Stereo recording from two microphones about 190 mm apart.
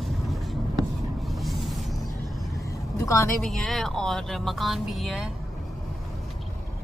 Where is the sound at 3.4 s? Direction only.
Centre (ahead or behind).